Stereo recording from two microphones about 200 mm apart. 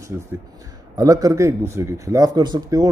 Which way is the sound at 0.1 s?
10° right (ahead or behind).